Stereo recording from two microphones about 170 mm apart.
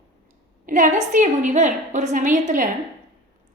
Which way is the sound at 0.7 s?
50° right (ahead or behind).